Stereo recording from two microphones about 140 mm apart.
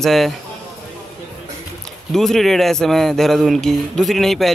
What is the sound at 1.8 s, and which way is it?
Speech, centre (ahead or behind).